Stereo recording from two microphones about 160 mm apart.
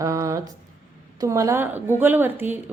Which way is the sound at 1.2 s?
20° right (ahead or behind).